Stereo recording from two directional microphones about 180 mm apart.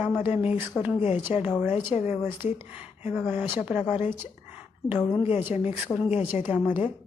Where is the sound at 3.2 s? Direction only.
10° right (ahead or behind).